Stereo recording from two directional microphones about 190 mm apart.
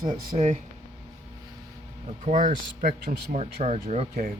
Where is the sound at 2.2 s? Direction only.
40° right (ahead or behind).